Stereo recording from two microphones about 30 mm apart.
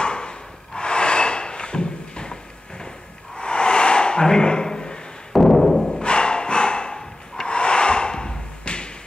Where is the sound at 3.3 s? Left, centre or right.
Left.